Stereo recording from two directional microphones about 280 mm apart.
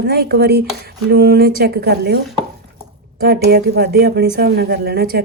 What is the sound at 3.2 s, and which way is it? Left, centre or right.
Speech, right.